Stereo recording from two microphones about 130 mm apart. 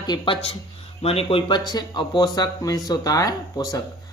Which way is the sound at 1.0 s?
50° left (ahead or behind).